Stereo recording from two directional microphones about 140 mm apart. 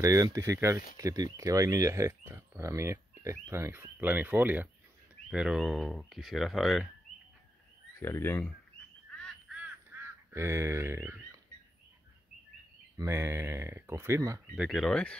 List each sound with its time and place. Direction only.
0.0 s speech: 25° right (ahead or behind); by 6.9 s centre (ahead or behind)
8.0 s speech: 15° left (ahead or behind)
9.9 s honk: 15° right (ahead or behind)
10.3 s speech: 20° right (ahead or behind)
12.9 s speech: 20° right (ahead or behind)
14.5 s speech: centre (ahead or behind)